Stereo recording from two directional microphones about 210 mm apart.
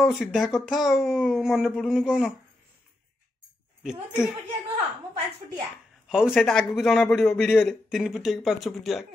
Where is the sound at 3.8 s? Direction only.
5° right (ahead or behind).